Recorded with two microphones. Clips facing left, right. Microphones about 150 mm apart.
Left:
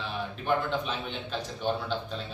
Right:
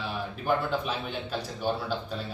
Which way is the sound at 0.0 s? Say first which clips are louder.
Right 1 dB; 5° right (ahead or behind).